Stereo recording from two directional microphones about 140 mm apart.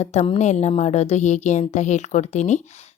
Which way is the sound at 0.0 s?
55° left (ahead or behind).